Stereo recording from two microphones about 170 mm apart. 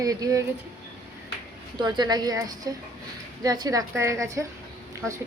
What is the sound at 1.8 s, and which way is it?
A woman's voice, 25° right (ahead or behind).